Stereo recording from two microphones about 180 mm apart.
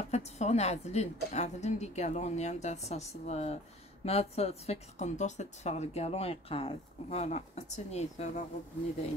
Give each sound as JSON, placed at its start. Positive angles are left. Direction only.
{"t": 0.0, "sound": "a woman's voice", "side_deg": 35}